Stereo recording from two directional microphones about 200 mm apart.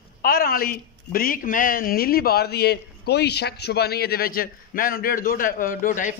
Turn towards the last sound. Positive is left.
turn(degrees=40)  # may be behind; listen again after turning